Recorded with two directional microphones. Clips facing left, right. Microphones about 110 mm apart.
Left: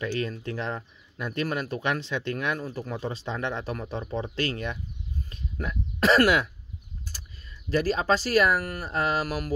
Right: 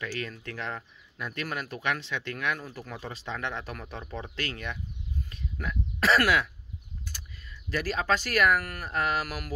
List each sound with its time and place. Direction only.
0.0 s speech: 30° left (ahead or behind)
7.7 s speech: 35° left (ahead or behind)